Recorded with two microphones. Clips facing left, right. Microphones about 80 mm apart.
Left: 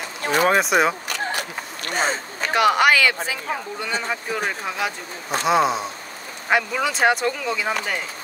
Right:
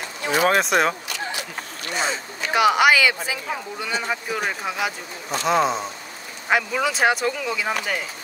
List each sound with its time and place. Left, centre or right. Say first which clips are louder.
0.2 s a sound: left 1 dB; left
0.5 s speech: left 1 dB; centre
1.0 s keys jangling: left 3 dB; left
1.9 s speech: left 2 dB; left
2.5 s speech: even; centre